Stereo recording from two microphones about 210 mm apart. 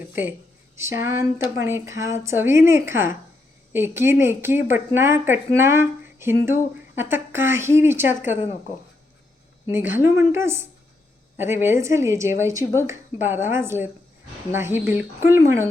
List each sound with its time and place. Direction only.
0.8 s a woman's voice: 10° right (ahead or behind)
9.8 s speech: 10° right (ahead or behind)